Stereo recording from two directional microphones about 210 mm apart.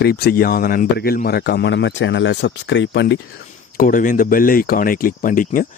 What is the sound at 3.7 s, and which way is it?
Speech, 40° left (ahead or behind).